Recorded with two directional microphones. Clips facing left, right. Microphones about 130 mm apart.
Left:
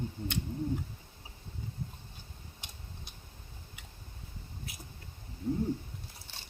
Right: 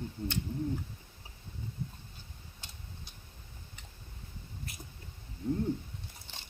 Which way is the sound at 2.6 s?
15° left (ahead or behind).